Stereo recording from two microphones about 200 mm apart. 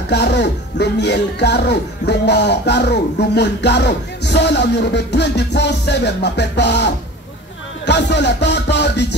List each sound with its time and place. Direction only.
0.1 s speech: 55° left (ahead or behind)